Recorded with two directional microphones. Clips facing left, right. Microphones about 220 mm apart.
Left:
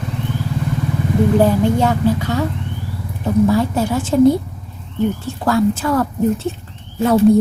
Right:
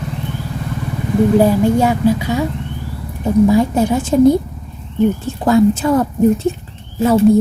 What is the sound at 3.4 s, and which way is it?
Speech, 15° right (ahead or behind).